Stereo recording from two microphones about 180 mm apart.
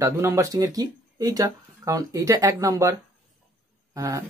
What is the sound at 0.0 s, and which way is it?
Speech, 15° right (ahead or behind).